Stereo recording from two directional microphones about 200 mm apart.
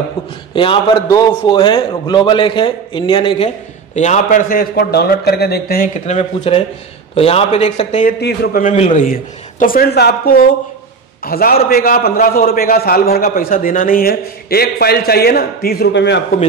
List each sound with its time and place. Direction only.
0.6 s a man's voice: 25° left (ahead or behind); by 5.9 s 50° left (ahead or behind)
6.0 s a man's voice: 35° left (ahead or behind)
8.2 s a man's voice: 50° left (ahead or behind)